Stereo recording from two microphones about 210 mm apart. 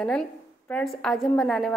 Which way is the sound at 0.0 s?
5° left (ahead or behind).